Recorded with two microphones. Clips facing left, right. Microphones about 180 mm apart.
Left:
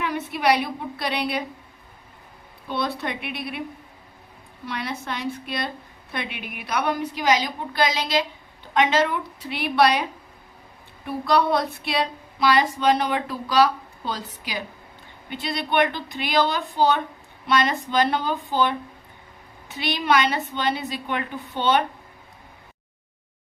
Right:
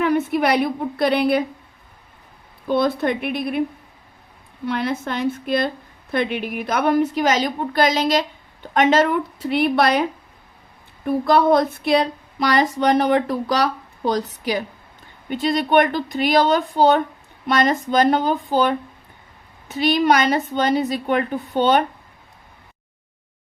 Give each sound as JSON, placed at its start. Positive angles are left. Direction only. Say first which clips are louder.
{"t": 0.0, "sound": "a woman's voice", "louder": "right 6 dB", "side_deg": -50}
{"t": 2.6, "sound": "a woman's voice", "louder": "right 8 dB", "side_deg": -50}
{"t": 4.6, "sound": "a woman's voice", "louder": "right 8 dB", "side_deg": -50}